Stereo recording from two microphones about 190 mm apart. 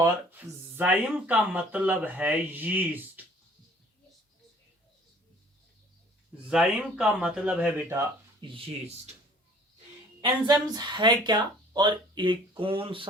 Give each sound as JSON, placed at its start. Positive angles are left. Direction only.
{"t": 0.0, "sound": "speech", "side_deg": -10}
{"t": 6.5, "sound": "speech", "side_deg": -5}
{"t": 8.4, "sound": "speech", "side_deg": -30}
{"t": 10.2, "sound": "speech", "side_deg": -20}